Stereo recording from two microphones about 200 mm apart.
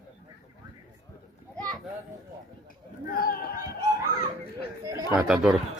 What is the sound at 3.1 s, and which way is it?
Chatter, 45° left (ahead or behind).